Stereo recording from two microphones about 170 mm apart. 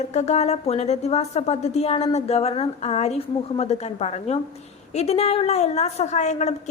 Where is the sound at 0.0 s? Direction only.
40° left (ahead or behind).